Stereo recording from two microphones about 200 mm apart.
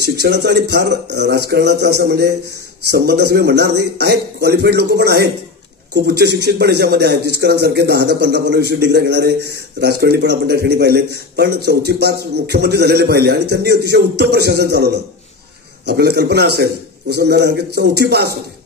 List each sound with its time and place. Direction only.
0.0 s a man's voice: 55° right (ahead or behind)